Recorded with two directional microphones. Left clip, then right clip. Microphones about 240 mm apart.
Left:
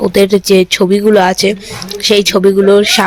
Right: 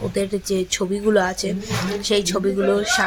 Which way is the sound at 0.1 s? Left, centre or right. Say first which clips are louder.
Left 15 dB; left.